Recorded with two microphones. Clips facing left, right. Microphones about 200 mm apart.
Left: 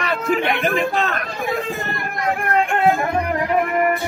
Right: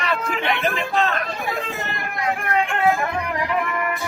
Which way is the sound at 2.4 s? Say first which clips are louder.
Left 3 dB; 40° left (ahead or behind).